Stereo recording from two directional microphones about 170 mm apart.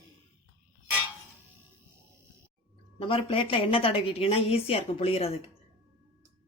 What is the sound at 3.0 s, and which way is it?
A woman's voice, 30° left (ahead or behind).